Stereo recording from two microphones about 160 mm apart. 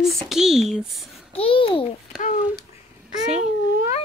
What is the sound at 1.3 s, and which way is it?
Babbling, 35° left (ahead or behind).